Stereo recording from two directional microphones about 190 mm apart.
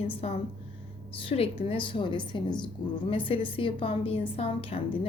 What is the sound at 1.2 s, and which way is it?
A woman's voice, 30° left (ahead or behind).